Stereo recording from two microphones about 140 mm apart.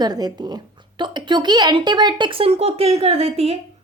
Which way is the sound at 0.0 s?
30° right (ahead or behind).